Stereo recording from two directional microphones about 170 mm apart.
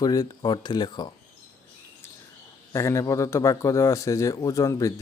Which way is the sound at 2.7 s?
15° left (ahead or behind).